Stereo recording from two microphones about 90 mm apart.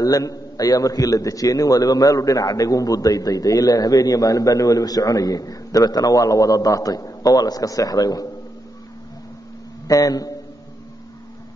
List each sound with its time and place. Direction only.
0.0 s a man's voice: 40° left (ahead or behind)
9.8 s a man's voice: 45° left (ahead or behind)